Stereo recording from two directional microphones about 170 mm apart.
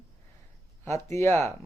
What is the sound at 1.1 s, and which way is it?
Speech, 15° left (ahead or behind).